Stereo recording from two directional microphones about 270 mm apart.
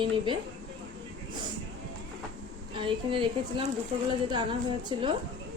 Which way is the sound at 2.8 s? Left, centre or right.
Centre.